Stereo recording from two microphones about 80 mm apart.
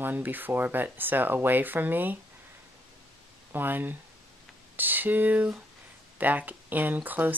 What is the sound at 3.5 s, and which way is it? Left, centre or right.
Speech, right.